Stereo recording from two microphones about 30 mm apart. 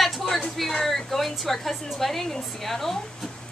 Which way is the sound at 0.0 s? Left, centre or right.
Centre.